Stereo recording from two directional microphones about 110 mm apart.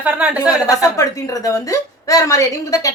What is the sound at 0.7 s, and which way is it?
Speech, 30° left (ahead or behind).